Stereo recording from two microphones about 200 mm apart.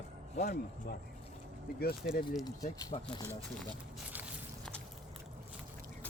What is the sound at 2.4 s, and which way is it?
Speech, 20° left (ahead or behind).